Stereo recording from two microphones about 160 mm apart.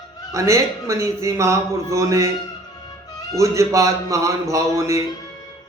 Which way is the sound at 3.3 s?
20° right (ahead or behind).